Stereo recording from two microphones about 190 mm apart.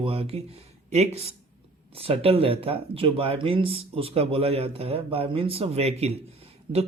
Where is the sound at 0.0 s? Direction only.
30° right (ahead or behind).